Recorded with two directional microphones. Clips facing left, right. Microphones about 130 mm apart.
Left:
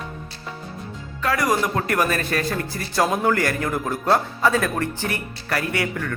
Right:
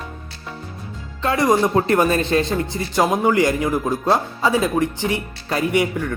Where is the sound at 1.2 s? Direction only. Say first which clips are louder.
Right 4 dB; 25° right (ahead or behind).